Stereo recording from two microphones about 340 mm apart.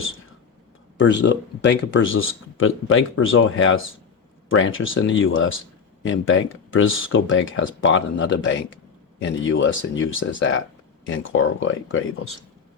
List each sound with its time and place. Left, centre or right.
0.9 s speech: left